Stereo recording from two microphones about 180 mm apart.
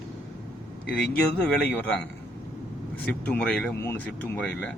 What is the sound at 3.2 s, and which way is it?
Speech, 5° left (ahead or behind).